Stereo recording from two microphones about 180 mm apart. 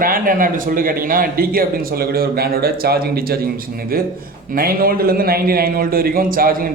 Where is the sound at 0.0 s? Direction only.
50° right (ahead or behind).